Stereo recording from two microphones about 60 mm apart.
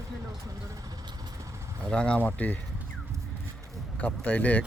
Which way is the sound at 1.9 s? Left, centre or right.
Centre.